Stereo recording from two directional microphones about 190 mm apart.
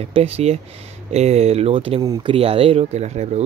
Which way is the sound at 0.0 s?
30° right (ahead or behind).